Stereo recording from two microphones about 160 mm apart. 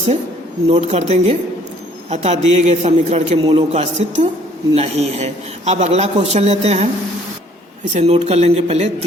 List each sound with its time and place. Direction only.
0.7 s a man's voice: 40° right (ahead or behind)
7.9 s speech: 40° right (ahead or behind)